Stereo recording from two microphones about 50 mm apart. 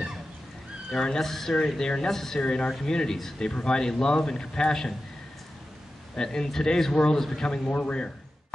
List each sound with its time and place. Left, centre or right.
0.9 s a man's voice: centre
6.1 s a man's voice: centre
7.7 s a man's voice: left